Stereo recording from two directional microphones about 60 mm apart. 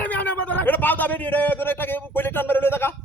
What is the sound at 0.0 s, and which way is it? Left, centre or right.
A man's voice, left.